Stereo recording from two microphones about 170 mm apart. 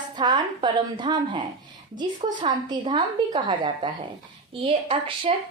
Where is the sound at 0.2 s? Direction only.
25° right (ahead or behind).